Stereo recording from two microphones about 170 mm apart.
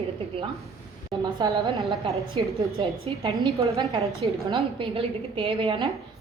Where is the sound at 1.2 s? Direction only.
25° right (ahead or behind).